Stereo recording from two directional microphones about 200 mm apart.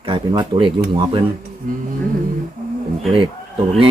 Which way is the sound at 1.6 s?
40° right (ahead or behind).